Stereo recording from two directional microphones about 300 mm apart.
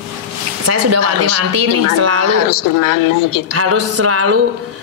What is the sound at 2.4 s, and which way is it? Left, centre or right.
A woman's voice, left.